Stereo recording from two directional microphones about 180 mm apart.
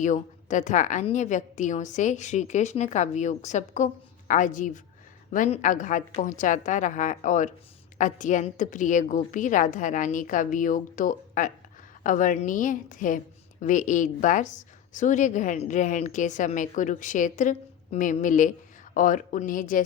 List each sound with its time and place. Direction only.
0.0 s a woman's voice: 45° left (ahead or behind)